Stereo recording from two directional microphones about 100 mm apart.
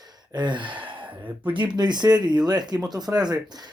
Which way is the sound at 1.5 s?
50° right (ahead or behind).